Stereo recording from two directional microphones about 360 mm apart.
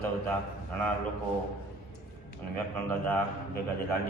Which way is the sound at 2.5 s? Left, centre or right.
Centre.